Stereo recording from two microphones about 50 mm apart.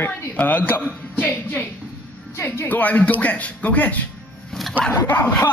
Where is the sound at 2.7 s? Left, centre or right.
Left.